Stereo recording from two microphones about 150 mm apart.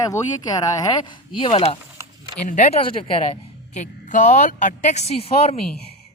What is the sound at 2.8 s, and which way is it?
Speech, 35° left (ahead or behind).